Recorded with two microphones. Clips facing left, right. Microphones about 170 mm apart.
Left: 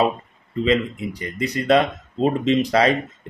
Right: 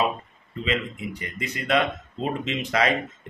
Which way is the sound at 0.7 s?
35° left (ahead or behind).